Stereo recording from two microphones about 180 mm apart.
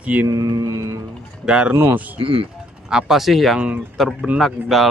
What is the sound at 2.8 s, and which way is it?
Speech, 5° right (ahead or behind).